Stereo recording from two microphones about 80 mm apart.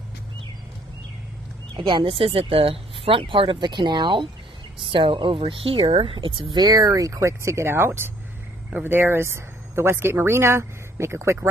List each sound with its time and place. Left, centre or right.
1.8 s speech: right
2.6 s speech: right
4.8 s a woman's voice: right